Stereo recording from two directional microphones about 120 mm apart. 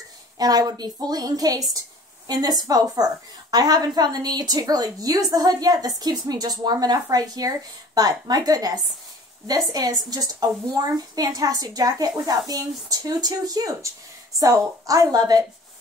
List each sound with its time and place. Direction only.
0.4 s a woman's voice: 30° right (ahead or behind)